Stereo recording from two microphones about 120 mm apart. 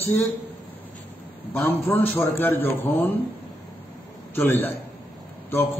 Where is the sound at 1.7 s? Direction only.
20° left (ahead or behind).